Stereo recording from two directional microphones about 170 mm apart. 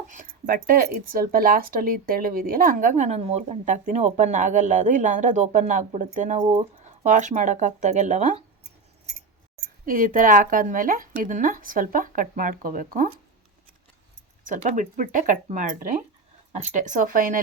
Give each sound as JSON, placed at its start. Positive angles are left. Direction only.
{"t": 0.1, "sound": "speech", "side_deg": -50}
{"t": 9.6, "sound": "speech", "side_deg": -55}
{"t": 14.4, "sound": "speech", "side_deg": -45}